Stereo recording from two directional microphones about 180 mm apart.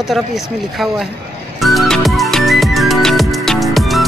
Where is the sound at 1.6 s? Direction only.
Centre (ahead or behind).